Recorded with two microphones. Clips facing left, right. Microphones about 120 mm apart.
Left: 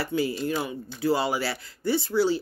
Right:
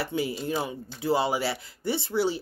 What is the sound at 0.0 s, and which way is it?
Speech, 20° right (ahead or behind).